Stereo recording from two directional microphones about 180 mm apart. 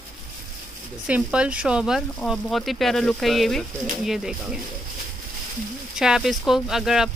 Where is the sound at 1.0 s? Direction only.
5° right (ahead or behind).